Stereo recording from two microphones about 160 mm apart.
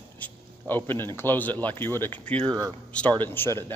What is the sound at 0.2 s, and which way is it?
Speech, 10° left (ahead or behind).